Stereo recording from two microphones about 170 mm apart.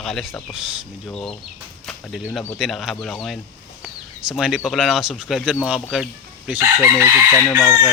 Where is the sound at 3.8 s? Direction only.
5° right (ahead or behind).